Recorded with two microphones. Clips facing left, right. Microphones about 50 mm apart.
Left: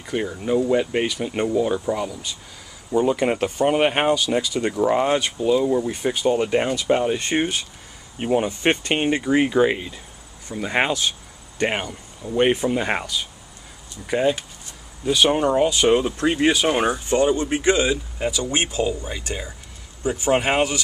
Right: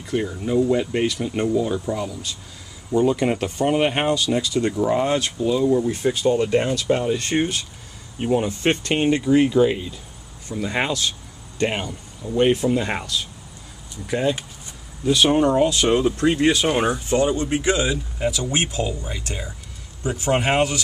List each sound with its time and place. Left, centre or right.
0.0 s speech: centre